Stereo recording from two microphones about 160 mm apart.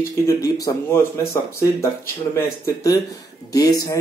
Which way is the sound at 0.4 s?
20° left (ahead or behind).